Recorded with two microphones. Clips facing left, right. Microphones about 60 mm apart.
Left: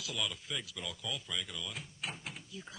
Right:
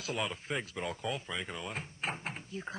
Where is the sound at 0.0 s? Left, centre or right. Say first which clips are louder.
Right 4 dB; right.